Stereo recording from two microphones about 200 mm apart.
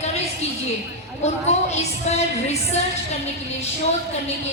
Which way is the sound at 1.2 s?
35° left (ahead or behind).